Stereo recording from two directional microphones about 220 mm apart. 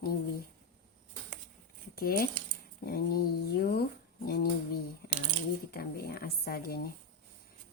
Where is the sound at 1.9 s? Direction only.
40° left (ahead or behind).